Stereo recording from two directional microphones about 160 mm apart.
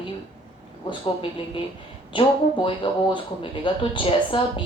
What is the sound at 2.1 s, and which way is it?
Speech, 30° left (ahead or behind).